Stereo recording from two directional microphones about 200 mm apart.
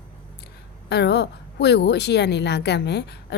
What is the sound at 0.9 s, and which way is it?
A woman's voice, 55° left (ahead or behind).